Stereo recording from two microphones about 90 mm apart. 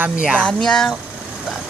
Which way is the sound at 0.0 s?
15° right (ahead or behind).